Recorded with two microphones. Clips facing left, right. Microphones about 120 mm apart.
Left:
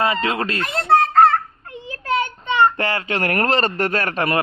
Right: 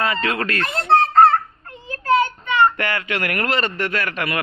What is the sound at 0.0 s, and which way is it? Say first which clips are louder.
Speech: left 2 dB; 25° left (ahead or behind).